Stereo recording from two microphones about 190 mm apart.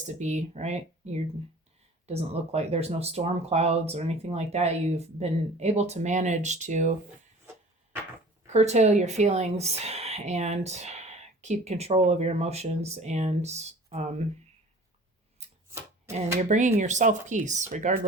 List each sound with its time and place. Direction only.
0.0 s speech: 40° right (ahead or behind)
8.5 s speech: 35° right (ahead or behind)
16.4 s speech: 40° right (ahead or behind)